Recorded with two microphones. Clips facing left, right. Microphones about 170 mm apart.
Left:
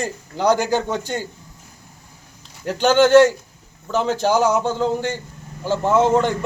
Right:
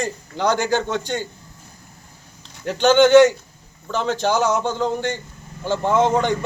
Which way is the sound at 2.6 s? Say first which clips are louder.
Right 1 dB; 5° left (ahead or behind).